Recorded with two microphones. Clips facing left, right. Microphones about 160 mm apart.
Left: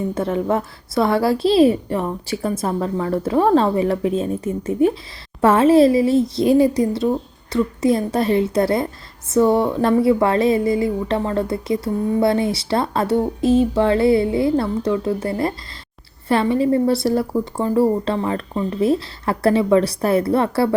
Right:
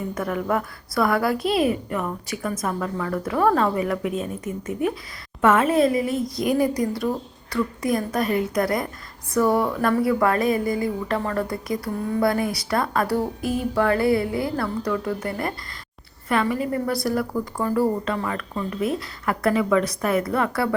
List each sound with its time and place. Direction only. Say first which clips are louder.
0.1 s a woman's voice: left 2 dB; 25° left (ahead or behind)